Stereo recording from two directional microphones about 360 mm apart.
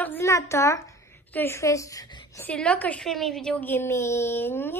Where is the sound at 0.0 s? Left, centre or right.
Centre.